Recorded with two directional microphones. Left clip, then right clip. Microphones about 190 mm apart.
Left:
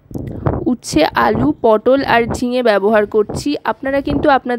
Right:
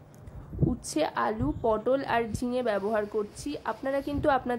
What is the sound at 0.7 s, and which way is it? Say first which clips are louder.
A woman's voice: left 13 dB; 45° left (ahead or behind).